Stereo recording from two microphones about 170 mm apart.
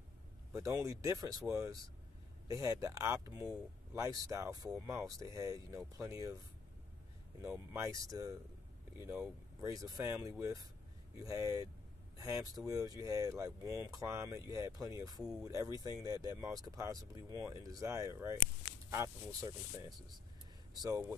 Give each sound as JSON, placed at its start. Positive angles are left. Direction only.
{"t": 0.6, "sound": "speech", "side_deg": -20}
{"t": 7.4, "sound": "speech", "side_deg": -15}
{"t": 20.7, "sound": "speech", "side_deg": -20}